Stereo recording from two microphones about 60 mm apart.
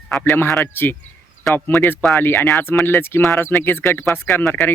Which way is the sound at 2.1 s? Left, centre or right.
Left.